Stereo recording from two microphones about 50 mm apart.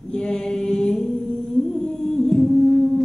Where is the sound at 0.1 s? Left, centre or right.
Centre.